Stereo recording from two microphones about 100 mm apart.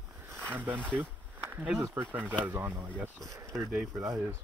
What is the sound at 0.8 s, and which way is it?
Speech, 5° left (ahead or behind).